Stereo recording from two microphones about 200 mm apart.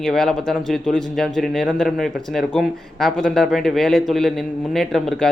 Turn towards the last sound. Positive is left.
turn(degrees=0)  # may be behind; listen again after turning